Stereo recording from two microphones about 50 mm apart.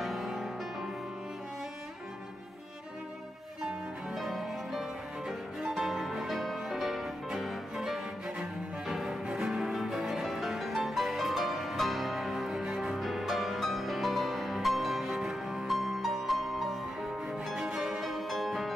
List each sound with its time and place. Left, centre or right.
0.0 s music: centre
4.1 s music: centre
17.6 s music: centre
17.8 s music: centre